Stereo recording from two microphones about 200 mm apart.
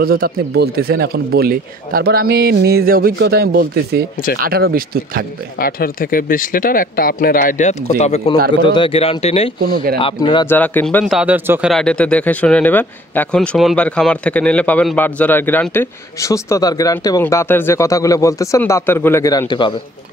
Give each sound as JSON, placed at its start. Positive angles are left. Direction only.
{"t": 0.0, "sound": "speech", "side_deg": -50}
{"t": 5.6, "sound": "speech", "side_deg": 45}
{"t": 9.6, "sound": "speech", "side_deg": -45}
{"t": 9.9, "sound": "speech", "side_deg": 25}
{"t": 10.4, "sound": "speech", "side_deg": 10}
{"t": 11.1, "sound": "speech", "side_deg": -10}
{"t": 11.7, "sound": "speech", "side_deg": 5}